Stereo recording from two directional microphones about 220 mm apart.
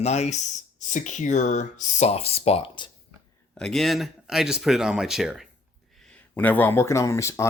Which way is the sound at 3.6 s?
Centre (ahead or behind).